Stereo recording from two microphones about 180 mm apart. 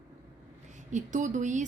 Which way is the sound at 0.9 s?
45° right (ahead or behind).